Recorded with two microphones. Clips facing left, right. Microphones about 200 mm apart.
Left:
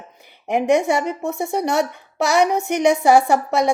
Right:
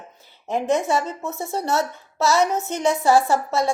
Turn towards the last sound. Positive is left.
turn(degrees=15)  # may be behind; listen again after turning